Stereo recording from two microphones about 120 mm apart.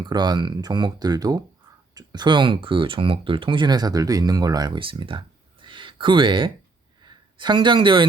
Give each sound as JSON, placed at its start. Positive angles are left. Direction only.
{"t": 0.0, "sound": "speech", "side_deg": -35}
{"t": 4.8, "sound": "a sound", "side_deg": -45}
{"t": 7.0, "sound": "a woman's voice", "side_deg": -40}